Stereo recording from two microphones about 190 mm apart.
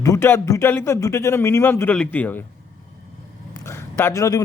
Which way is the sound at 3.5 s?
15° left (ahead or behind).